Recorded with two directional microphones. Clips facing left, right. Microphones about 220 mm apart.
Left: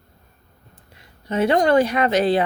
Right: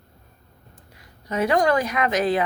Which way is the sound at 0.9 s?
25° left (ahead or behind).